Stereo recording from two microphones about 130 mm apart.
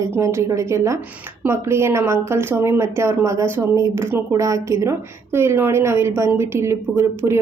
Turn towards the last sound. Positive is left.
turn(degrees=-20)  # may be behind; listen again after turning